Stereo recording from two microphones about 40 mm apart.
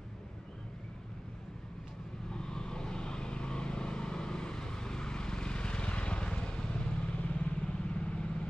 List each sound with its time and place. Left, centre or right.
2.2 s vehicle: centre